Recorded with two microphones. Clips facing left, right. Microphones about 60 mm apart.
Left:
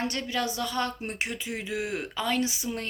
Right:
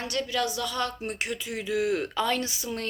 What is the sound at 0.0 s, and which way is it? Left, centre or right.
Speech, left.